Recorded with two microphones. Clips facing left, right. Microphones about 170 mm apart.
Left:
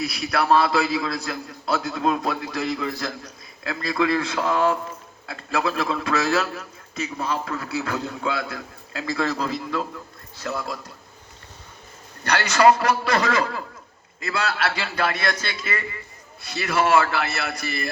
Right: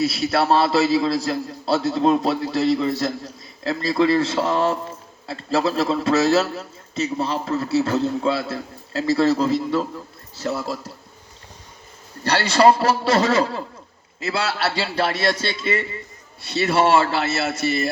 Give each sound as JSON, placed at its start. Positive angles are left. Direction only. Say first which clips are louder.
{"t": 0.2, "sound": "a man's voice", "louder": "left 1 dB", "side_deg": -25}
{"t": 12.2, "sound": "a man's voice", "louder": "right 2 dB", "side_deg": -30}